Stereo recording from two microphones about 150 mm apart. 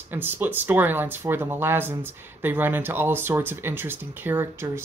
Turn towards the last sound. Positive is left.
turn(degrees=-15)  # may be behind; listen again after turning